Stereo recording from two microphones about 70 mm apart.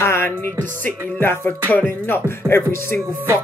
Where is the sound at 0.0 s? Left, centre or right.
Left.